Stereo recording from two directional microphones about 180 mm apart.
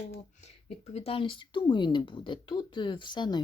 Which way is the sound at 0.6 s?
35° left (ahead or behind).